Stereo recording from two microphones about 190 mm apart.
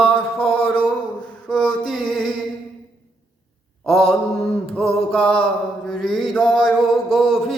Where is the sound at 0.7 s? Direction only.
25° left (ahead or behind).